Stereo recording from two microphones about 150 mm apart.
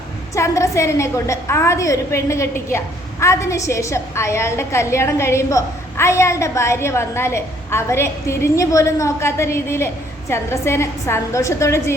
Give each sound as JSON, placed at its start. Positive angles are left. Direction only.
{"t": 0.3, "sound": "a woman's voice", "side_deg": 20}